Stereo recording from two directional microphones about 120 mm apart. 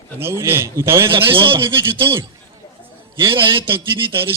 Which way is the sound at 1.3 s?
45° right (ahead or behind).